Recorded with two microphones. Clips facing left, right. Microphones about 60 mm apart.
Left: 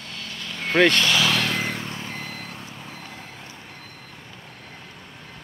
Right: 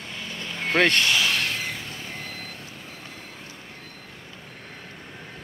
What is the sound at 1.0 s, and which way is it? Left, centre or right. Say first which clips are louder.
Vehicle: left 2 dB; left.